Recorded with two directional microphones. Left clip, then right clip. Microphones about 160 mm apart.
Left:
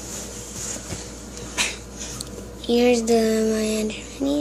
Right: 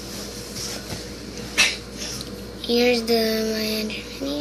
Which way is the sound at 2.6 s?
45° left (ahead or behind).